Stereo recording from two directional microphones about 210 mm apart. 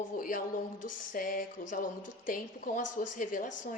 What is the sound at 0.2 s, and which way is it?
Speech, 40° left (ahead or behind).